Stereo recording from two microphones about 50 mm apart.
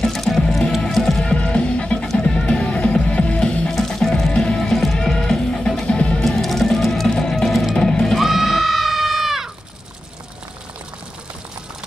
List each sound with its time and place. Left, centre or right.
0.0 s music: centre
1.2 s music: left
3.7 s music: centre
6.1 s music: centre
8.2 s music: centre